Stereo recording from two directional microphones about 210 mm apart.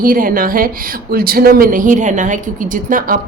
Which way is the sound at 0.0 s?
40° right (ahead or behind).